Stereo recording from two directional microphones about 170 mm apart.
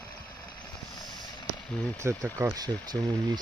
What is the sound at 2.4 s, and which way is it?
Speech, 20° right (ahead or behind).